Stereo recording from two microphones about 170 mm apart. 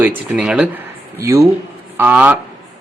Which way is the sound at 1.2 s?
15° right (ahead or behind).